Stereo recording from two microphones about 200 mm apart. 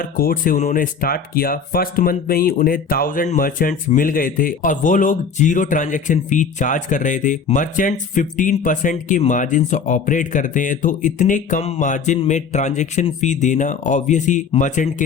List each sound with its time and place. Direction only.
0.0 s speech: 45° left (ahead or behind)